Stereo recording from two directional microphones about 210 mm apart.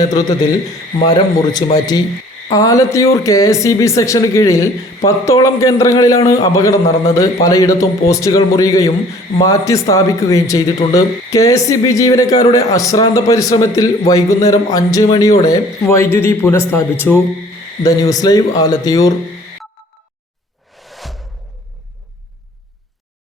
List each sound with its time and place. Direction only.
0.0 s a man's voice: 15° left (ahead or behind)
20.8 s music: centre (ahead or behind)